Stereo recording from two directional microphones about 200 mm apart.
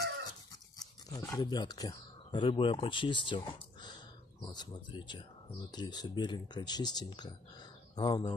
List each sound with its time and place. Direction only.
0.7 s speech: 20° left (ahead or behind)